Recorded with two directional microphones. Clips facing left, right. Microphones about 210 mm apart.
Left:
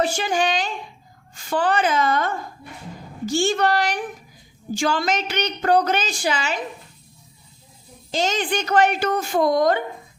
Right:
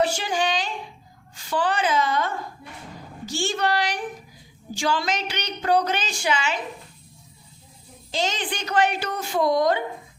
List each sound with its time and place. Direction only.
0.2 s a child's voice: 45° left (ahead or behind)
3.2 s a sound: 50° left (ahead or behind)
4.7 s a woman's voice: 50° left (ahead or behind)
8.1 s a woman's voice: 45° left (ahead or behind)